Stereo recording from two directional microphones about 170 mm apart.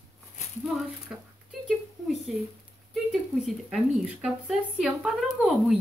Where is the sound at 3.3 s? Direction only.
Centre (ahead or behind).